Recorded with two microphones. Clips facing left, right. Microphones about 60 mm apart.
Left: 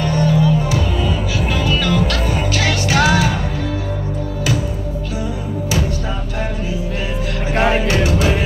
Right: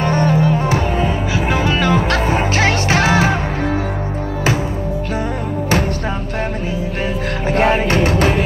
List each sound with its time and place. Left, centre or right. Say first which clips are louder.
0.0 s music: right 1 dB; right
7.6 s music: right 1 dB; right